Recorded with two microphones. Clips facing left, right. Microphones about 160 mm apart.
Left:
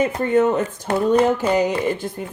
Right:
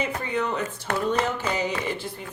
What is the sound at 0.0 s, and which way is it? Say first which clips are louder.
Speech: left 10 dB; 50° left (ahead or behind).